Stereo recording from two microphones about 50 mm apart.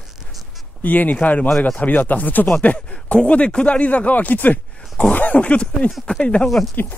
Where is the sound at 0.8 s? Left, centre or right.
Left.